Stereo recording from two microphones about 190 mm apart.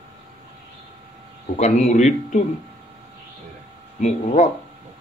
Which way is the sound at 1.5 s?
35° left (ahead or behind).